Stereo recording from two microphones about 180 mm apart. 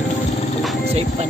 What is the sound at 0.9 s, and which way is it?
Speech, 35° right (ahead or behind).